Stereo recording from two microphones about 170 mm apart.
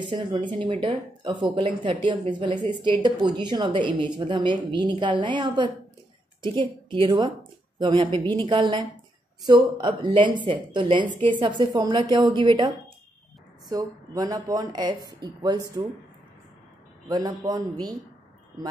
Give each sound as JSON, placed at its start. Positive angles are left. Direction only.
{"t": 0.0, "sound": "a woman's voice", "side_deg": -30}
{"t": 17.1, "sound": "a woman's voice", "side_deg": -25}